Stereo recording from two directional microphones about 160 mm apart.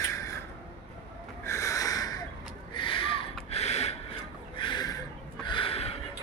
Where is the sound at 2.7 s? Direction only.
30° left (ahead or behind).